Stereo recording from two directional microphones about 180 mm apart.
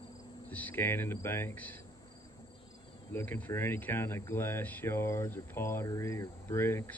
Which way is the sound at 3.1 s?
10° left (ahead or behind).